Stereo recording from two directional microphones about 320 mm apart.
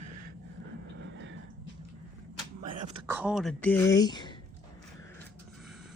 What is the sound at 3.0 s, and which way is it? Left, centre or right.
Speech, centre.